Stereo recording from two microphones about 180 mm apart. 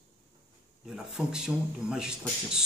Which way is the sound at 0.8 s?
Centre (ahead or behind).